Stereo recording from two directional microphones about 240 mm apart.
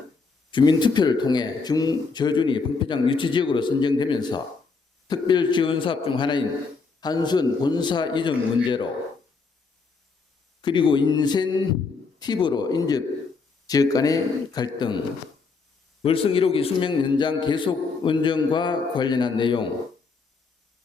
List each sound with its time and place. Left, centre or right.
0.5 s a man's voice: centre
10.6 s speech: centre
16.0 s a man's voice: left